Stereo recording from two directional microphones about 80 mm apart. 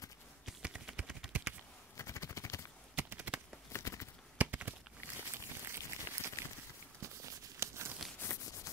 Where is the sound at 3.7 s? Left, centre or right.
Left.